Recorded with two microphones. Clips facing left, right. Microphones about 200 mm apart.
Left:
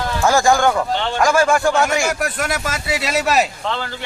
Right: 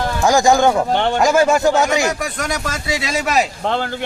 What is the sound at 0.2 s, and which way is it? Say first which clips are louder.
Speech: right 2 dB; 15° right (ahead or behind).